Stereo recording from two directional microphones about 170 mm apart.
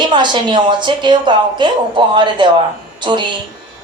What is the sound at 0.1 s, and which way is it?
Speech, 25° right (ahead or behind).